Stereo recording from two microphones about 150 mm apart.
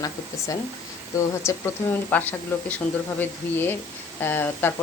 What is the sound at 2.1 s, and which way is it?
Speech, 10° left (ahead or behind).